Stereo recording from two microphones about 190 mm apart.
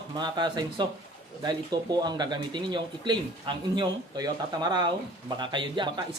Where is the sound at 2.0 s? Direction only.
20° right (ahead or behind).